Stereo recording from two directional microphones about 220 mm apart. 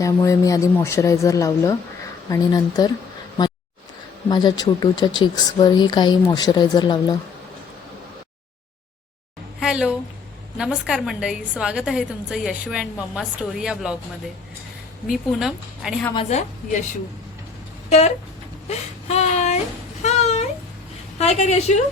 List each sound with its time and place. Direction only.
0.0 s speech: 15° left (ahead or behind)
4.3 s speech: 20° left (ahead or behind)
9.6 s a sound: 5° right (ahead or behind)
10.6 s a woman's voice: 5° right (ahead or behind)
15.1 s a woman's voice: centre (ahead or behind)
16.1 s a woman's voice: 30° left (ahead or behind)
17.8 s speech: 30° left (ahead or behind)
20.0 s a sound: 30° left (ahead or behind)
21.2 s speech: 30° left (ahead or behind)